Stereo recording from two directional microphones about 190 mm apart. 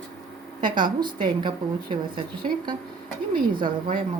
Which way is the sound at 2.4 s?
35° right (ahead or behind).